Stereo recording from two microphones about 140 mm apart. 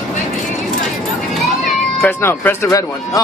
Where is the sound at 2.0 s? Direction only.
15° left (ahead or behind).